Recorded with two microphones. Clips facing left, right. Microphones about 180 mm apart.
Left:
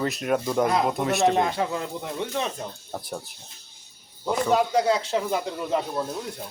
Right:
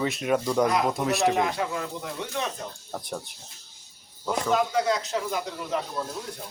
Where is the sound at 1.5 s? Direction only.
25° left (ahead or behind).